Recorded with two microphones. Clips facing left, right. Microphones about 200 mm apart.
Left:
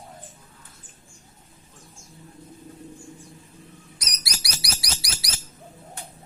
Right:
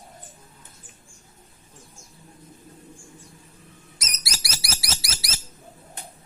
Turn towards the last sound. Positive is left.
turn(degrees=-25)  # may be behind; listen again after turning